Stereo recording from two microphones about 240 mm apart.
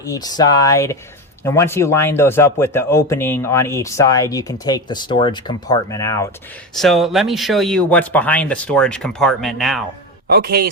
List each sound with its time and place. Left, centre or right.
0.0 s a man's voice: centre
6.7 s speech: centre
10.2 s a man's voice: right